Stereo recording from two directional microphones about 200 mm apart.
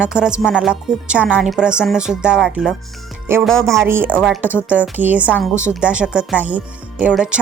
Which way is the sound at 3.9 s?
10° right (ahead or behind).